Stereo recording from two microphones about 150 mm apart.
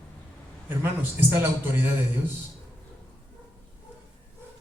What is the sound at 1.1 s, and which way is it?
Speech, 15° right (ahead or behind).